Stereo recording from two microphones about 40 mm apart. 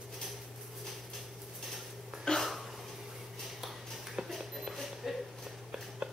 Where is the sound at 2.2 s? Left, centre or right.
Centre.